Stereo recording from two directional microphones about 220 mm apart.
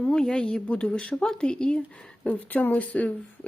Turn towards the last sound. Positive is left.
turn(degrees=5)  # may be behind; listen again after turning